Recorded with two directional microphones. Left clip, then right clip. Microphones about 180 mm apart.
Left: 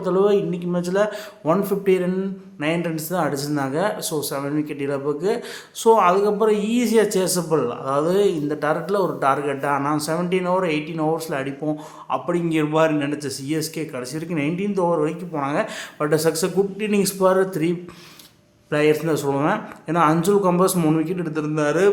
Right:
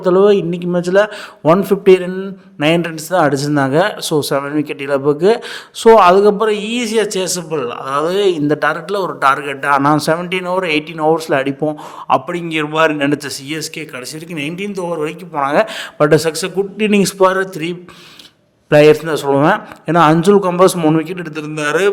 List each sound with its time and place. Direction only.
0.0 s a man's voice: 40° right (ahead or behind)
2.0 s speech: 30° right (ahead or behind)
2.6 s speech: 45° right (ahead or behind)
14.3 s a man's voice: 60° right (ahead or behind)